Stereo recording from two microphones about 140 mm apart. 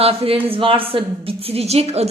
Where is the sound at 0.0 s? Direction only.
45° right (ahead or behind).